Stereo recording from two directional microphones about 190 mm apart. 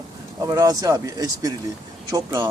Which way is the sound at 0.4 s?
20° right (ahead or behind).